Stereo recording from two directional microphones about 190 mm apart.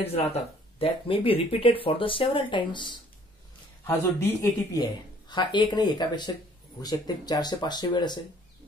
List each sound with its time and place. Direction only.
0.0 s speech: 30° left (ahead or behind)
3.8 s a man's voice: 15° left (ahead or behind)